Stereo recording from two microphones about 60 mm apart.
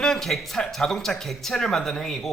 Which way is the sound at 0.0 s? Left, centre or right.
Centre.